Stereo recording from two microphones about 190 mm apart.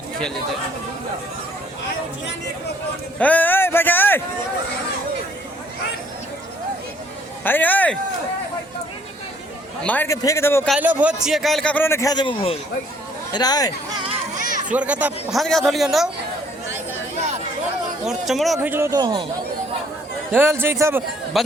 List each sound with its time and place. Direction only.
3.2 s a sound: 10° left (ahead or behind)
7.4 s a man's voice: 10° left (ahead or behind)
9.8 s a man's voice: 10° left (ahead or behind)
10.7 s a man's voice: 5° right (ahead or behind); by 13.7 s 20° left (ahead or behind)
14.3 s children playing: 40° right (ahead or behind)
14.7 s a man's voice: 5° right (ahead or behind)
17.2 s chatter: 35° right (ahead or behind)
18.0 s speech: centre (ahead or behind)
18.7 s speech: 15° right (ahead or behind)
20.3 s a man's voice: 10° right (ahead or behind)
21.3 s speech: centre (ahead or behind)